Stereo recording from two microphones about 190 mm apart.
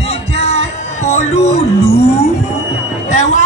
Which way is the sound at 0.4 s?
35° left (ahead or behind).